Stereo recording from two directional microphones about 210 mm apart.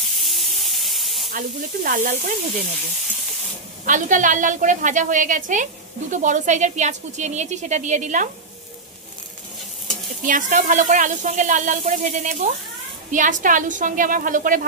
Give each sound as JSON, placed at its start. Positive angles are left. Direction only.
{"t": 0.2, "sound": "steam", "side_deg": 0}
{"t": 1.3, "sound": "a woman's voice", "side_deg": -40}
{"t": 3.8, "sound": "a woman's voice", "side_deg": -40}
{"t": 10.2, "sound": "a woman's voice", "side_deg": -40}